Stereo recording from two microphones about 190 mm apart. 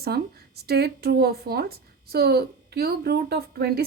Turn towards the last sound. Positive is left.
turn(degrees=-55)  # may be behind; listen again after turning